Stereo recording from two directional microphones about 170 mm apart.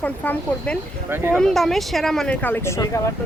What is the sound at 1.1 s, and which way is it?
Speech, 10° right (ahead or behind).